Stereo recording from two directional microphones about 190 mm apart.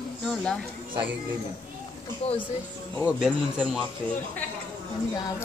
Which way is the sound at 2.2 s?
30° left (ahead or behind).